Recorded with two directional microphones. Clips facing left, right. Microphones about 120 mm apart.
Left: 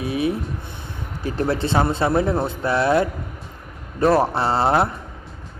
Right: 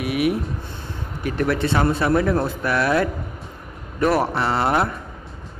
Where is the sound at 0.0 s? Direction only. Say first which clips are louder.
Right 1 dB; 30° left (ahead or behind).